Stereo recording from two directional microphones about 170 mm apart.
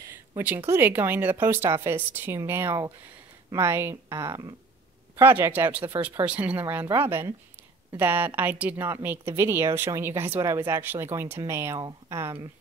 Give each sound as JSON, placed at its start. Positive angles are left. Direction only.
{"t": 0.4, "sound": "speech", "side_deg": -10}